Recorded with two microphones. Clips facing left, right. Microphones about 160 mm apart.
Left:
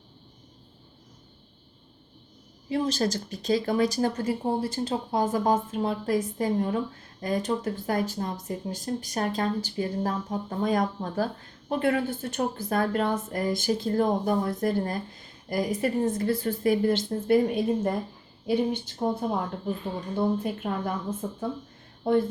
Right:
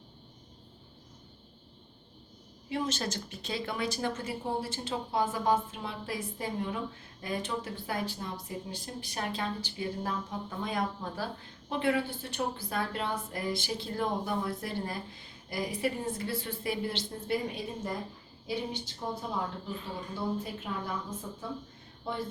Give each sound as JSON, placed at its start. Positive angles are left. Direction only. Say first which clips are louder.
{"t": 2.6, "sound": "a woman's voice", "louder": "left 7 dB", "side_deg": 35}